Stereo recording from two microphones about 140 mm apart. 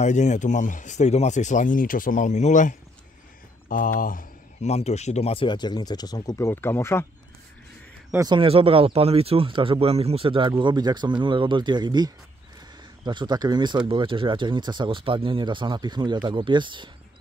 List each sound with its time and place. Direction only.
0.0 s speech: 60° left (ahead or behind)
3.6 s a sound: 75° left (ahead or behind)
4.6 s speech: 50° left (ahead or behind); by 7.1 s 15° left (ahead or behind)
8.2 s speech: 35° right (ahead or behind)